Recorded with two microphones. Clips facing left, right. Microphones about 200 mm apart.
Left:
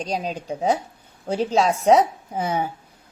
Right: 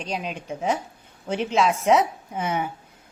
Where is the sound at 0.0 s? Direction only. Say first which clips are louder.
Left 4 dB; 35° left (ahead or behind).